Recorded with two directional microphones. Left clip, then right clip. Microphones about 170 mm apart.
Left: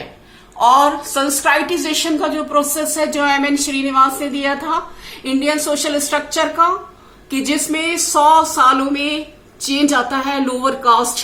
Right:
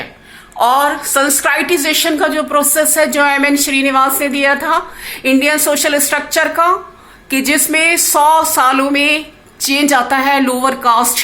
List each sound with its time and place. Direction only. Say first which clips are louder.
0.6 s a woman's voice: even; 30° right (ahead or behind)